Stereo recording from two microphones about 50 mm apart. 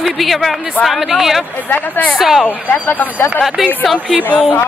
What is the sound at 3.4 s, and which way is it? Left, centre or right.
Speech, centre.